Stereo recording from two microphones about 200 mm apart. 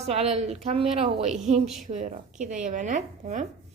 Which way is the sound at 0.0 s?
30° right (ahead or behind).